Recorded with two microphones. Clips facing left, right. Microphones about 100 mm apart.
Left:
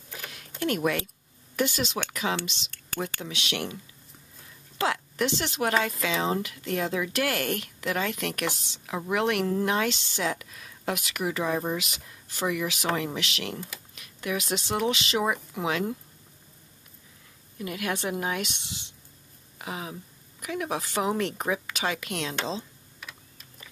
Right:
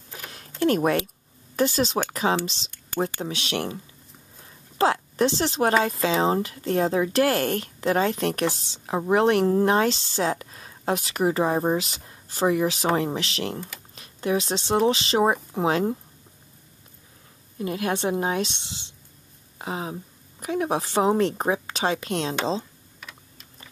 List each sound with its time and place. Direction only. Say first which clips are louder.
0.6 s a woman's voice: right 6 dB; 35° right (ahead or behind)
17.6 s speech: right 5 dB; 30° right (ahead or behind)
22.9 s typing: right 1 dB; centre (ahead or behind)